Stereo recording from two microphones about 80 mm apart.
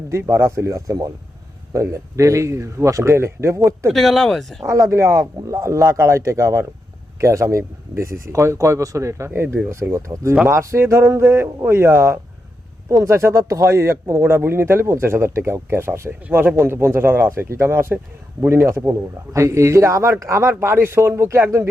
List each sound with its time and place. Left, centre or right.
0.1 s speech: right
3.8 s speech: centre
4.6 s speech: right